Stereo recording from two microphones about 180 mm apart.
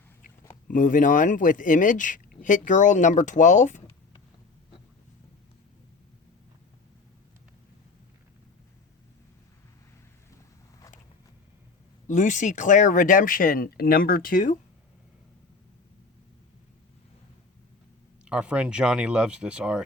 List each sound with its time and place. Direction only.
0.7 s a man's voice: 50° left (ahead or behind)
12.0 s a man's voice: 45° left (ahead or behind)
18.3 s speech: 5° right (ahead or behind)